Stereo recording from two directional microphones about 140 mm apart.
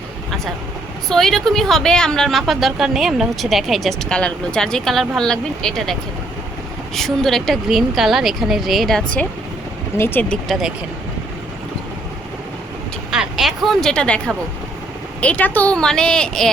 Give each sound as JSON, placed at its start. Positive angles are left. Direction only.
{"t": 1.1, "sound": "speech", "side_deg": 5}
{"t": 13.1, "sound": "speech", "side_deg": -5}